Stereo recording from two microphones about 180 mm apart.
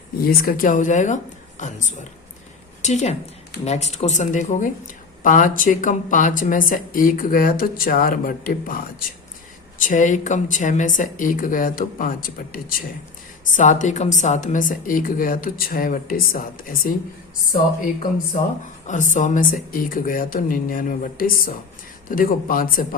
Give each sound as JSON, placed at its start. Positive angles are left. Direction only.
{"t": 0.2, "sound": "speech", "side_deg": 55}
{"t": 13.6, "sound": "speech", "side_deg": 45}
{"t": 18.9, "sound": "speech", "side_deg": 45}